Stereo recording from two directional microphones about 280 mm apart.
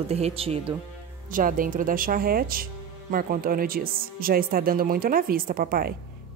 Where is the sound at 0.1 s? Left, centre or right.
Right.